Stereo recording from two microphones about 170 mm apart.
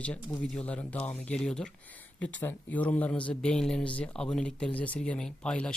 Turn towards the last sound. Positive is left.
turn(degrees=5)  # may be behind; listen again after turning